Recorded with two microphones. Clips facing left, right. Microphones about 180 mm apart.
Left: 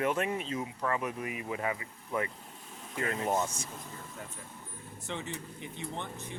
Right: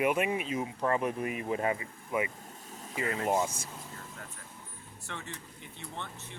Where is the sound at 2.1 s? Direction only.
10° right (ahead or behind).